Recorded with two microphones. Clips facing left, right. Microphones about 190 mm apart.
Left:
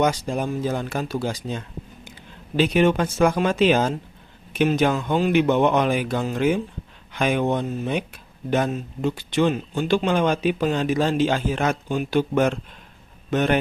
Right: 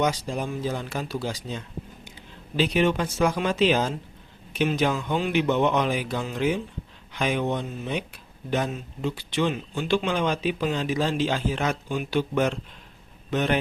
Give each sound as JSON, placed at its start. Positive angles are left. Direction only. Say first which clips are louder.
{"t": 0.0, "sound": "speech", "louder": "left 4 dB", "side_deg": 50}